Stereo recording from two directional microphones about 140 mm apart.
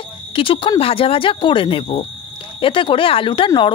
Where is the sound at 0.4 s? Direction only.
40° left (ahead or behind).